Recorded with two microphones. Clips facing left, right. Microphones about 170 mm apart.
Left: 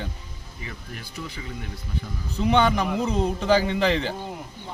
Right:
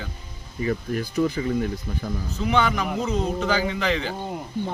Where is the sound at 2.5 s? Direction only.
30° left (ahead or behind).